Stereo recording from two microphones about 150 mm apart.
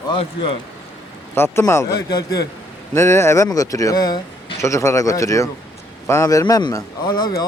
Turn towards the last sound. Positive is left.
turn(degrees=30)  # may be behind; listen again after turning